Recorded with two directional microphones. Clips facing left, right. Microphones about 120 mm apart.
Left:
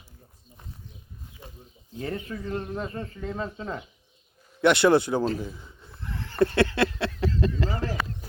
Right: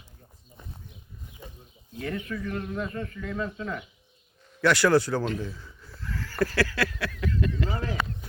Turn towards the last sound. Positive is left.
turn(degrees=35)  # may be behind; listen again after turning